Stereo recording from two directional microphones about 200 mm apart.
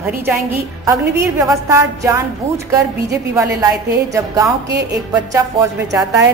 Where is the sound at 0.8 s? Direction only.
15° right (ahead or behind).